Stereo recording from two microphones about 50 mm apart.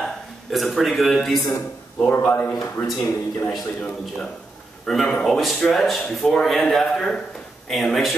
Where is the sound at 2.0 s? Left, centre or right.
Left.